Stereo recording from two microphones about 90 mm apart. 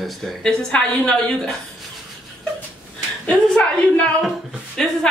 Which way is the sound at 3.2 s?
15° left (ahead or behind).